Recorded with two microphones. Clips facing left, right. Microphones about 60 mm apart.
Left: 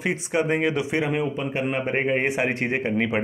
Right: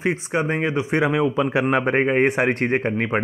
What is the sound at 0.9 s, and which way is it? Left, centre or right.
A man's voice, right.